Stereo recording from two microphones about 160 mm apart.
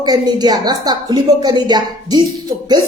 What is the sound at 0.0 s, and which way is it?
Speech, 25° right (ahead or behind).